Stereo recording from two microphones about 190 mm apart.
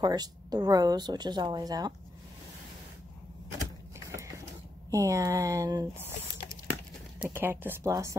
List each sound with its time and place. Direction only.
0.0 s speech: 20° right (ahead or behind)
4.9 s speech: 15° right (ahead or behind)
7.2 s speech: 10° right (ahead or behind)